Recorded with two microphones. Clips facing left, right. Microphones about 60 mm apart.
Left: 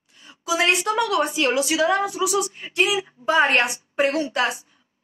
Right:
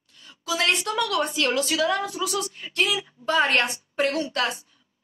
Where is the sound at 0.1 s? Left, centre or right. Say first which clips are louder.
Left 4 dB; centre.